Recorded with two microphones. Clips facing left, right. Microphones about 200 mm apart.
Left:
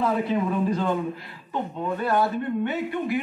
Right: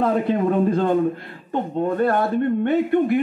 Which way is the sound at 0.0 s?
55° right (ahead or behind).